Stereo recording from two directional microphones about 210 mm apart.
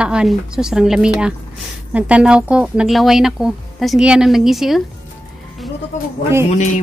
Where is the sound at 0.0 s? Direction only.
5° right (ahead or behind).